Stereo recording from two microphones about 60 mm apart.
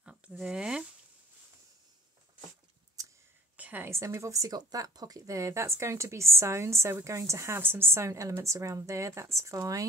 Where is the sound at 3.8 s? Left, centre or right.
Right.